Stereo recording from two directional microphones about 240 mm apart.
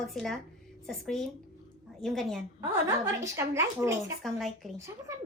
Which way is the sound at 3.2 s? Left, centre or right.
Centre.